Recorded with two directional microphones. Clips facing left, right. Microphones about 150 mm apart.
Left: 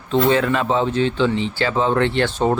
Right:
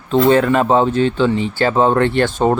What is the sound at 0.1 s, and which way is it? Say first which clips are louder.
Speech: right 4 dB; 45° right (ahead or behind).